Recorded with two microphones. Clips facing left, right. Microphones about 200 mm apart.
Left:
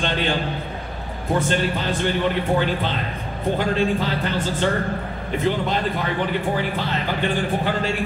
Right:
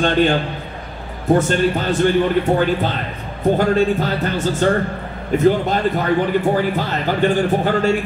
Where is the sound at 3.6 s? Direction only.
45° right (ahead or behind).